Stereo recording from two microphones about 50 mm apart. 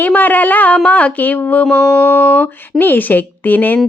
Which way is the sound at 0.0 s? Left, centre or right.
Left.